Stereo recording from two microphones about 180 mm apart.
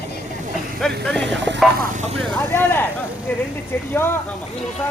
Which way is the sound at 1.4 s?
85° right.